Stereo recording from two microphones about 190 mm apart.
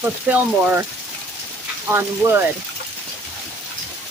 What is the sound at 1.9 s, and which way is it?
Speech, 15° right (ahead or behind).